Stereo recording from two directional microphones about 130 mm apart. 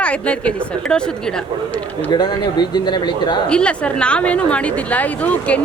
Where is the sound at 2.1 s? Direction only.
35° left (ahead or behind).